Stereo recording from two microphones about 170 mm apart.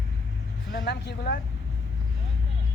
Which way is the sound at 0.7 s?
75° left (ahead or behind).